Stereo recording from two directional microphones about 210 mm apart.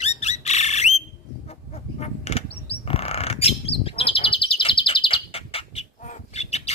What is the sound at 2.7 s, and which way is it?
Bird, 30° left (ahead or behind).